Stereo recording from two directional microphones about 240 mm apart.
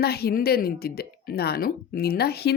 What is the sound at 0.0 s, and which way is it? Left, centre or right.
Speech, left.